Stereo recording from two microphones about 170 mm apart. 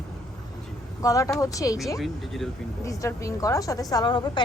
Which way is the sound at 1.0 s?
20° left (ahead or behind).